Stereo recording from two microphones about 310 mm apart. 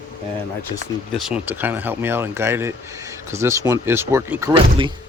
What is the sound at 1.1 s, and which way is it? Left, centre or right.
Speech, centre.